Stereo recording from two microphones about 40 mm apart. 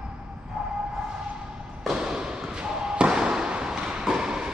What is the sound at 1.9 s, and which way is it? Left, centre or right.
Basketball bounce, centre.